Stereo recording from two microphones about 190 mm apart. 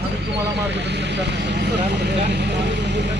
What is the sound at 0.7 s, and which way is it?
Speech, 65° right (ahead or behind).